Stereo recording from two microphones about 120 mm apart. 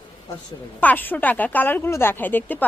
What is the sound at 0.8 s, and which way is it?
A woman's voice, 15° left (ahead or behind).